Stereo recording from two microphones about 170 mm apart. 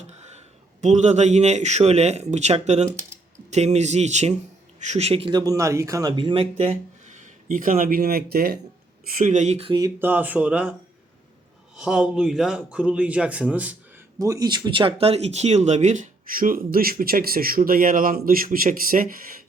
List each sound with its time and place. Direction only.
0.1 s a man's voice: 40° right (ahead or behind); by 8.5 s 65° right (ahead or behind)
9.1 s speech: 45° right (ahead or behind)
9.8 s speech: 10° right (ahead or behind)
11.8 s a man's voice: 5° right (ahead or behind)
14.2 s a man's voice: 20° right (ahead or behind); by 19.3 s 55° right (ahead or behind)